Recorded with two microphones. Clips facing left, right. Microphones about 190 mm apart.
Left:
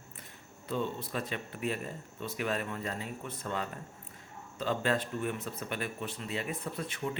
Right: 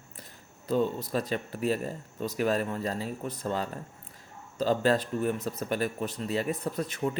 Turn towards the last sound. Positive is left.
turn(degrees=-40)  # may be behind; listen again after turning